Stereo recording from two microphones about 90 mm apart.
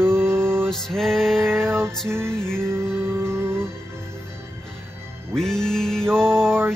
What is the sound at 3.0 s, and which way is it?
Music, 30° right (ahead or behind).